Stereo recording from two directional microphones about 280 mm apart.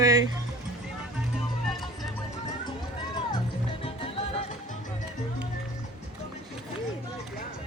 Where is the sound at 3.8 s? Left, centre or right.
Centre.